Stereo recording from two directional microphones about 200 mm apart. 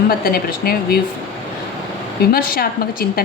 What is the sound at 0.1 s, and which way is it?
Speech, 50° left (ahead or behind).